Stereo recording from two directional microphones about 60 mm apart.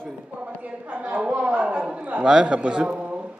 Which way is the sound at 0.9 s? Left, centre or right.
Right.